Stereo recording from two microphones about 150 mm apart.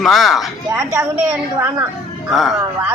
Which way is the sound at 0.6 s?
20° right (ahead or behind).